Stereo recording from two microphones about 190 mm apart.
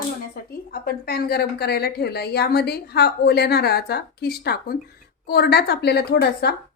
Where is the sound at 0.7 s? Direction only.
55° left (ahead or behind).